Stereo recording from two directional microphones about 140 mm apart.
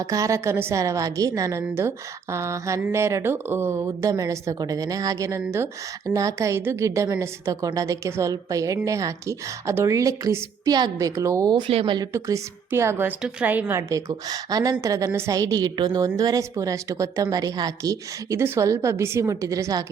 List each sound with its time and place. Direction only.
0.0 s a woman's voice: 25° right (ahead or behind)
11.7 s speech: 45° right (ahead or behind)
11.9 s a woman's voice: 20° right (ahead or behind)